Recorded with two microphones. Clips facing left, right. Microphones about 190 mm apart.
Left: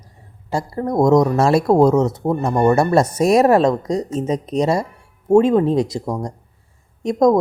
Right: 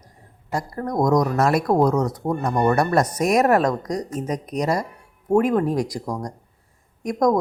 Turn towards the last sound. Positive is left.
turn(degrees=25)  # may be behind; listen again after turning